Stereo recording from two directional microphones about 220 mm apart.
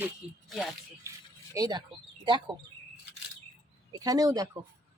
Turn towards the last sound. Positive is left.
turn(degrees=-15)  # may be behind; listen again after turning